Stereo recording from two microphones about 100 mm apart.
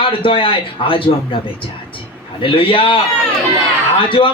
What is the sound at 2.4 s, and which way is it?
Speech, 60° left (ahead or behind).